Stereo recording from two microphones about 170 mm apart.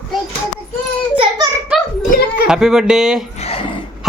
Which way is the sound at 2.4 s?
5° right (ahead or behind).